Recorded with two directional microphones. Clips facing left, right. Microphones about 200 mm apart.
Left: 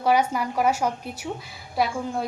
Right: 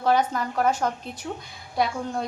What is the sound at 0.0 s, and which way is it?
A woman's voice, 10° left (ahead or behind).